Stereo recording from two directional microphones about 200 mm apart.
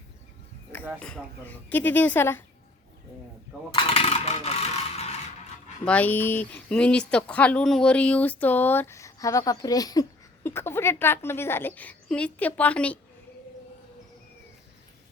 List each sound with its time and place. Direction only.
0.9 s speech: 5° left (ahead or behind)
3.8 s speech: 25° left (ahead or behind)
5.8 s speech: 5° left (ahead or behind)